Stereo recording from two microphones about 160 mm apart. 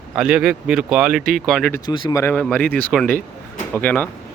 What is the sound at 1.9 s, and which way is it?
Speech, 25° left (ahead or behind).